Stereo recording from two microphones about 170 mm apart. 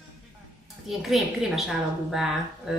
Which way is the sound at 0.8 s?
Centre (ahead or behind).